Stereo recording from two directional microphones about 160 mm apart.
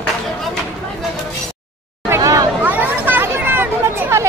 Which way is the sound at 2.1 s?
25° right (ahead or behind).